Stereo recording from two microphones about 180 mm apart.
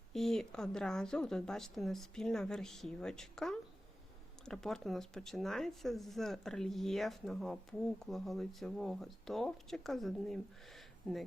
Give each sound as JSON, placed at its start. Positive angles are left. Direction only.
{"t": 0.1, "sound": "speech", "side_deg": 0}